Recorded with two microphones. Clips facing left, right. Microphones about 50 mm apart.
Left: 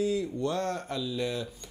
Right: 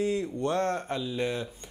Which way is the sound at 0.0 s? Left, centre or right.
Right.